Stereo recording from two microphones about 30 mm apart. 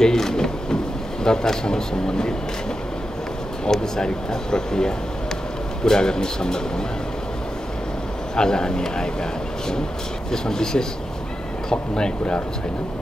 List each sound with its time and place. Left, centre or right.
0.0 s a sound: centre
1.2 s speech: left
3.6 s speech: left
8.4 s speech: left
10.3 s speech: left